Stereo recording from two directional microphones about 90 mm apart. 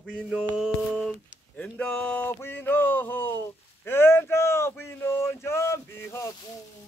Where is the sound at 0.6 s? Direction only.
5° right (ahead or behind).